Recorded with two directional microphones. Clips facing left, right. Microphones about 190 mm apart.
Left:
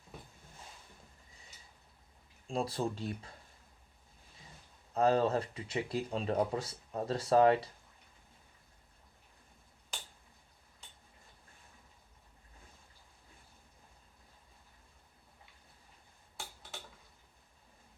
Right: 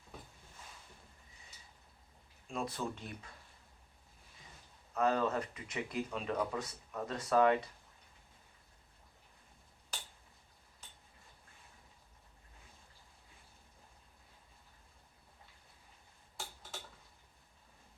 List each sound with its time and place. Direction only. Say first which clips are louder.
2.5 s speech: left 4 dB; 30° left (ahead or behind)
4.9 s speech: left 4 dB; 30° left (ahead or behind)